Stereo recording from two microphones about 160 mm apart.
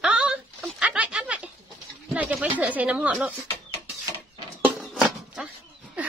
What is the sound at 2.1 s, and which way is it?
Speech, 10° right (ahead or behind).